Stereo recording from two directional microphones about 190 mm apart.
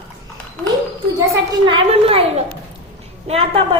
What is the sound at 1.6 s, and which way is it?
A woman's voice, 30° right (ahead or behind).